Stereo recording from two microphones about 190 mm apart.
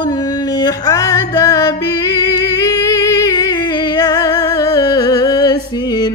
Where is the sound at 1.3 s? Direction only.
20° left (ahead or behind).